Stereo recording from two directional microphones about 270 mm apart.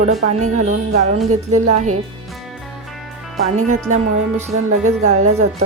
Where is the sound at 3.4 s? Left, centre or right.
Right.